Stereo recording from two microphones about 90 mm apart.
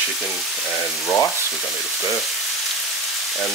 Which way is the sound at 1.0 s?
35° left (ahead or behind).